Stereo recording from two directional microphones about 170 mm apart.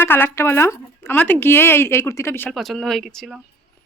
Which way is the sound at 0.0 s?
15° left (ahead or behind).